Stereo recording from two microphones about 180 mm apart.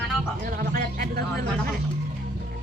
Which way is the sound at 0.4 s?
50° right (ahead or behind).